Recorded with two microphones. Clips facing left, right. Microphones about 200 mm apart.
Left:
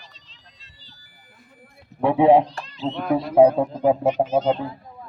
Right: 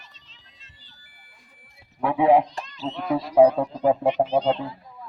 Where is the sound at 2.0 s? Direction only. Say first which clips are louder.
Left 3 dB; 30° left (ahead or behind).